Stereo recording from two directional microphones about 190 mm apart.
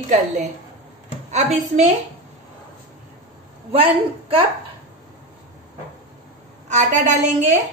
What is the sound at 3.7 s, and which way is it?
Speech, 30° right (ahead or behind).